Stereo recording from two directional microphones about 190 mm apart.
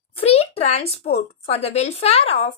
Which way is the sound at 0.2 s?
30° left (ahead or behind).